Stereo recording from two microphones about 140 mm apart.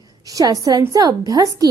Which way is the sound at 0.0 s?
25° right (ahead or behind).